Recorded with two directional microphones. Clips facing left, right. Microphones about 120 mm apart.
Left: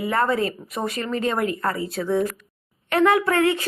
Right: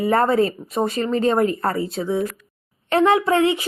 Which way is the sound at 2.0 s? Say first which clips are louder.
Left 3 dB; 10° right (ahead or behind).